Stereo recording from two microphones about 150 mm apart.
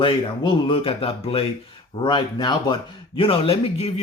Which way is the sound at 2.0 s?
30° left (ahead or behind).